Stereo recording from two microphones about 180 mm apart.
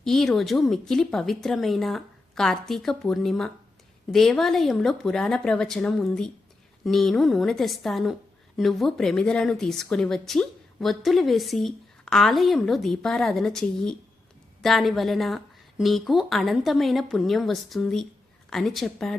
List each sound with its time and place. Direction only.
0.0 s speech: centre (ahead or behind)